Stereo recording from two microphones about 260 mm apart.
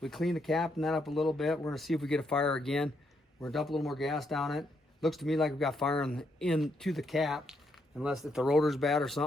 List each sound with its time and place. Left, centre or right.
0.0 s speech: centre